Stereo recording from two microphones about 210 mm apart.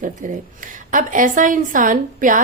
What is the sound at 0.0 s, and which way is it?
A woman's voice, 40° right (ahead or behind).